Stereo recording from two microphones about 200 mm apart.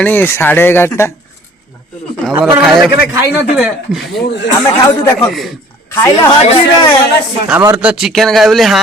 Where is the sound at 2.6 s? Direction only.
Centre (ahead or behind).